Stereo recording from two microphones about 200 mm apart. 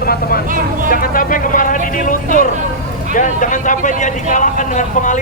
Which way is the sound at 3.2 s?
40° left (ahead or behind).